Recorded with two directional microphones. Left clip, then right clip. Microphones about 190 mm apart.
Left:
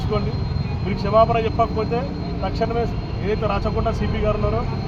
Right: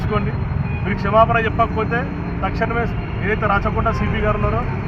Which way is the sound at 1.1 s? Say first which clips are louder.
Right 2 dB; 10° right (ahead or behind).